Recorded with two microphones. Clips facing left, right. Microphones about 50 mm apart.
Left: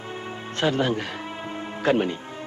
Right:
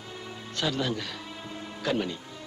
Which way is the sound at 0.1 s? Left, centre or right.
Left.